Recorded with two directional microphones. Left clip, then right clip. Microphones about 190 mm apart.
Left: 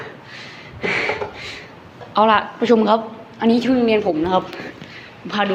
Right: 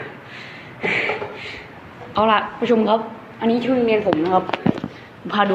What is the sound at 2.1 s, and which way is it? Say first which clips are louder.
A woman's voice: left 2 dB; 15° left (ahead or behind).